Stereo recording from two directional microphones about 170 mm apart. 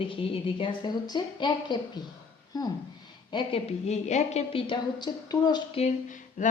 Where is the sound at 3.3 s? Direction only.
35° left (ahead or behind).